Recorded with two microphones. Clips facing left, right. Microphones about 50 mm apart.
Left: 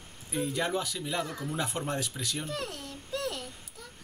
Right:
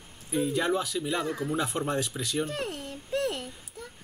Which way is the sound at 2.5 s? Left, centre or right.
Right.